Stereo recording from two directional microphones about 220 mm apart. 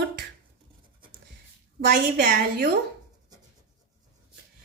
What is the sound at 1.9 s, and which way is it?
Speech, 40° right (ahead or behind).